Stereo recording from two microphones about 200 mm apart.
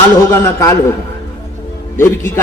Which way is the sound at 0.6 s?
15° left (ahead or behind).